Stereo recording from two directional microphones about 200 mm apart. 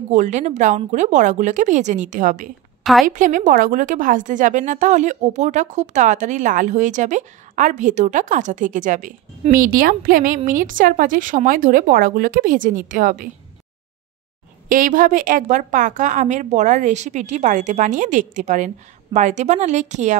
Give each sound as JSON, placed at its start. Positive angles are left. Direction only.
{"t": 0.1, "sound": "a woman's voice", "side_deg": -35}
{"t": 2.8, "sound": "a woman's voice", "side_deg": 0}
{"t": 3.1, "sound": "a woman's voice", "side_deg": -40}
{"t": 14.7, "sound": "a woman's voice", "side_deg": -40}